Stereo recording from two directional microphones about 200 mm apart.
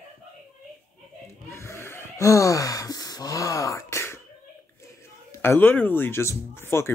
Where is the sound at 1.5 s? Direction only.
15° left (ahead or behind).